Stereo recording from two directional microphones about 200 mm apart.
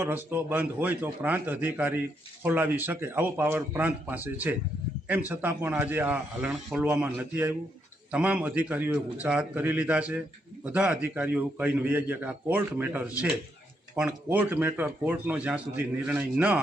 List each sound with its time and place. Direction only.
0.0 s speech: 10° right (ahead or behind)